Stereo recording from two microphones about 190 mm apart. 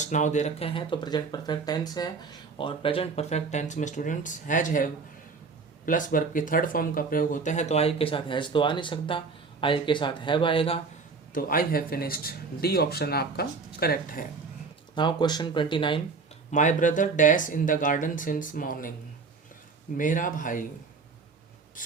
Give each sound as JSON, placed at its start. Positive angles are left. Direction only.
{"t": 0.0, "sound": "speech", "side_deg": 40}
{"t": 11.3, "sound": "speech", "side_deg": 50}
{"t": 14.9, "sound": "speech", "side_deg": 25}
{"t": 16.5, "sound": "speech", "side_deg": 40}
{"t": 20.0, "sound": "speech", "side_deg": 45}
{"t": 21.8, "sound": "writing", "side_deg": 45}